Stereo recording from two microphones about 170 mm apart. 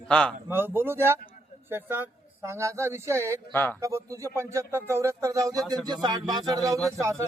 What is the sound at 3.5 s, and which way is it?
Speech, 10° left (ahead or behind).